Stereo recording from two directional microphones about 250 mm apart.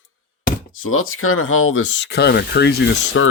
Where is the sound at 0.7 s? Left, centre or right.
Left.